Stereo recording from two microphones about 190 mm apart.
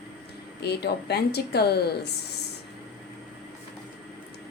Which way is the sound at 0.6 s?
60° left (ahead or behind).